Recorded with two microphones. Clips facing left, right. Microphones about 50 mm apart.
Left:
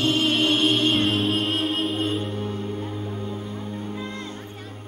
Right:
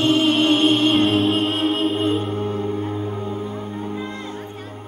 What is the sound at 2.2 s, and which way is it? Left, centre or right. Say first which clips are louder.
Music: right 5 dB; right.